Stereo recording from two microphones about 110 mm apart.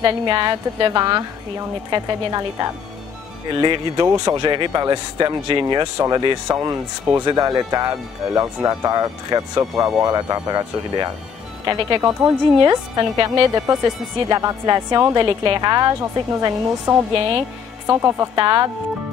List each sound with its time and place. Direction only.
0.0 s a woman's voice: 45° right (ahead or behind)
5.9 s speech: 30° right (ahead or behind)
11.6 s a woman's voice: 45° right (ahead or behind)
15.1 s a woman's voice: 45° right (ahead or behind); by 18.4 s 25° right (ahead or behind)
18.4 s speech: 40° right (ahead or behind)